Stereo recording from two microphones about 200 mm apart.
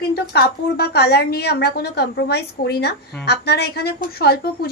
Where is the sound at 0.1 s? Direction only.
55° left (ahead or behind).